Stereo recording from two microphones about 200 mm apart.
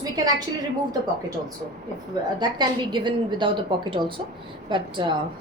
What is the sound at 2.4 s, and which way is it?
A woman's voice, 20° right (ahead or behind).